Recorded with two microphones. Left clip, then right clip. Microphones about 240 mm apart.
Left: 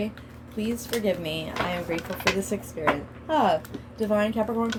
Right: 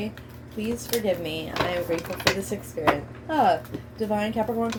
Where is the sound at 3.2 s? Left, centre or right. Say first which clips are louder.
Right 1 dB; left.